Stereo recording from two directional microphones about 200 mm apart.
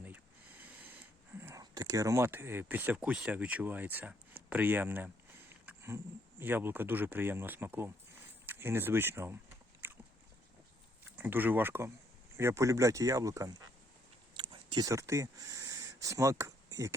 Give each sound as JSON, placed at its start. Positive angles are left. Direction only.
{"t": 1.4, "sound": "speech", "side_deg": -15}
{"t": 5.6, "sound": "a sound", "side_deg": -10}
{"t": 6.4, "sound": "speech", "side_deg": -10}
{"t": 9.8, "sound": "biting", "side_deg": -10}
{"t": 11.2, "sound": "speech", "side_deg": -10}
{"t": 14.3, "sound": "a sound", "side_deg": -25}